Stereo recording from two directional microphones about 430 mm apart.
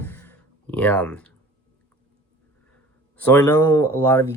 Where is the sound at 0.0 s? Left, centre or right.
Centre.